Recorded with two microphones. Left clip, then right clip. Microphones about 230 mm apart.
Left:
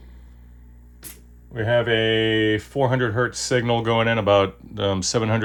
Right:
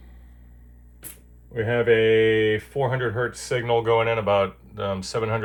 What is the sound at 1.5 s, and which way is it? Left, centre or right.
Speech, left.